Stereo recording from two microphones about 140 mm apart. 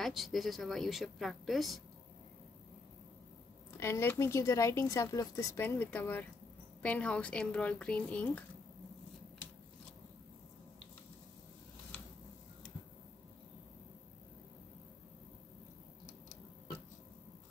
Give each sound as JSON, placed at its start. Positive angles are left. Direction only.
{"t": 0.0, "sound": "a woman's voice", "side_deg": 0}
{"t": 3.8, "sound": "speech", "side_deg": 20}